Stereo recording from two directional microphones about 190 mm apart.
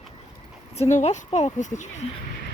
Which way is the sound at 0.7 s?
40° left (ahead or behind).